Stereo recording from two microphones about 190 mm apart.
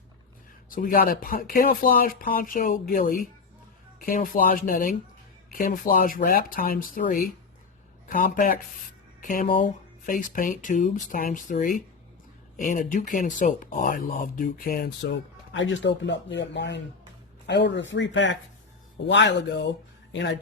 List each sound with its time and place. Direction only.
0.7 s speech: 50° left (ahead or behind)
15.5 s speech: 75° left (ahead or behind)